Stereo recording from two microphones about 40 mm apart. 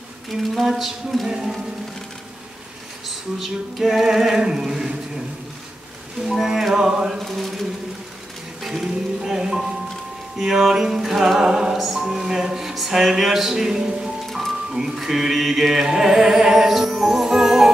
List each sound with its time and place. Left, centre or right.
0.3 s a sound: centre
1.2 s music: centre
3.3 s music: centre
6.2 s music: centre
7.2 s mantra: centre
8.6 s speech: centre
10.3 s music: centre